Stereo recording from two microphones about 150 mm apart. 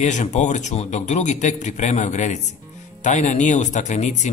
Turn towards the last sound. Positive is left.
turn(degrees=50)  # may be behind; listen again after turning